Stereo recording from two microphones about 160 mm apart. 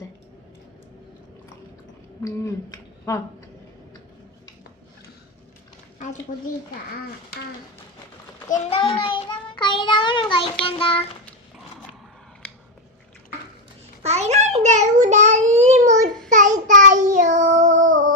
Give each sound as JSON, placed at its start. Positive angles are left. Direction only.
{"t": 2.2, "sound": "speech", "side_deg": 20}
{"t": 8.7, "sound": "child singing", "side_deg": 30}
{"t": 14.0, "sound": "a sound", "side_deg": -40}
{"t": 16.3, "sound": "child singing", "side_deg": -50}